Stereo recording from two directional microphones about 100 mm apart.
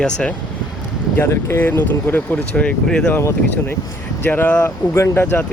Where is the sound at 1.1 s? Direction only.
25° left (ahead or behind).